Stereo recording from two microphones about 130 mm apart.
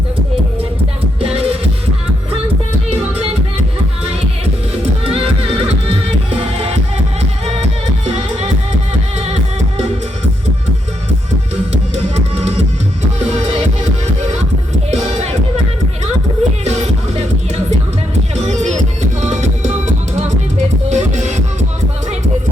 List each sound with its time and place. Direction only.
1.2 s music: 50° right (ahead or behind)
4.8 s music: 50° right (ahead or behind)
9.1 s music: 55° right (ahead or behind)
13.1 s music: 55° right (ahead or behind)
14.8 s music: 55° right (ahead or behind)
16.4 s music: 55° right (ahead or behind)
18.4 s music: 65° right (ahead or behind)
20.9 s music: 65° right (ahead or behind)